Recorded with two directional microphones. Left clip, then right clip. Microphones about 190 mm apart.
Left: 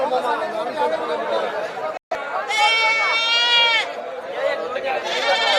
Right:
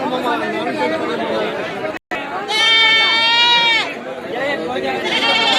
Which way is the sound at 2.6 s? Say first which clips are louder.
Right 6 dB; 60° left (ahead or behind).